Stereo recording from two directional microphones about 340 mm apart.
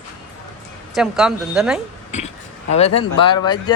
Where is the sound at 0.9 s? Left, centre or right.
Centre.